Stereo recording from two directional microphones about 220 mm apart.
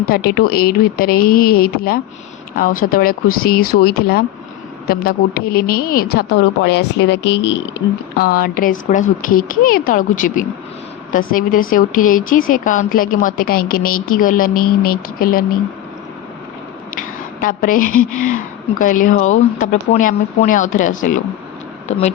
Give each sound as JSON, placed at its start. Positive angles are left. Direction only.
{"t": 0.0, "sound": "a woman's voice", "side_deg": 45}
{"t": 8.2, "sound": "speech", "side_deg": 40}
{"t": 17.4, "sound": "speech", "side_deg": 40}